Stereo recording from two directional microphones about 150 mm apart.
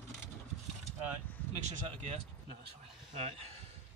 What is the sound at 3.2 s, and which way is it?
Speech, 45° right (ahead or behind).